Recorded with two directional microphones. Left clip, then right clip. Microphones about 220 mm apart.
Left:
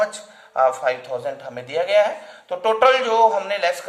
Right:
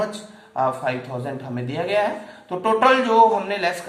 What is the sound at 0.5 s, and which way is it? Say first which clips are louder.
A man's voice: left 4 dB; 50° left (ahead or behind).